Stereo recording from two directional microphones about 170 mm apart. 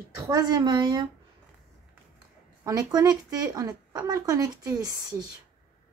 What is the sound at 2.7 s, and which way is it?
Speech, 20° right (ahead or behind).